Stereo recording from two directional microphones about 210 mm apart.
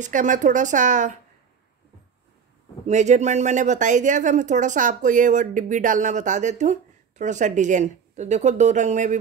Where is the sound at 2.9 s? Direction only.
35° right (ahead or behind).